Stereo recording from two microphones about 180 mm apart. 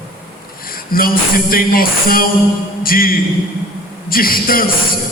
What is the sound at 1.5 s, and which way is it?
Speech, 55° left (ahead or behind).